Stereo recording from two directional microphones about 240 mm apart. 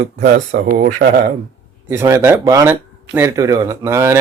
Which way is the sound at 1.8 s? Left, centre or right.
Centre.